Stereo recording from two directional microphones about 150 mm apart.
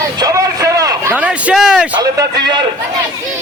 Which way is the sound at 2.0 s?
30° right (ahead or behind).